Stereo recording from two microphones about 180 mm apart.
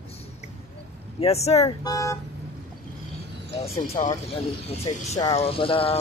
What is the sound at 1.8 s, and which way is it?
Speech, 20° left (ahead or behind).